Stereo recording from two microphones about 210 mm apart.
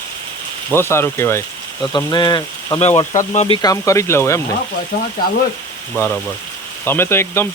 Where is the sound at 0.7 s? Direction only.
10° left (ahead or behind); by 3.2 s 25° left (ahead or behind).